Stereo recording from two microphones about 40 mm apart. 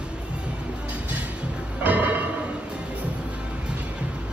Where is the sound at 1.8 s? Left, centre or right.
Right.